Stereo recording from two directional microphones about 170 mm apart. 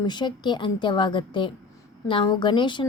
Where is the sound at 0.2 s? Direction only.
25° left (ahead or behind).